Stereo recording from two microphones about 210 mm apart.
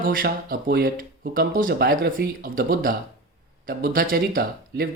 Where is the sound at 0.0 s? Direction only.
40° right (ahead or behind).